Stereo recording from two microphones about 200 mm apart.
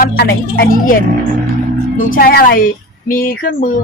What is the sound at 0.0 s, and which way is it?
Speech, 50° left (ahead or behind).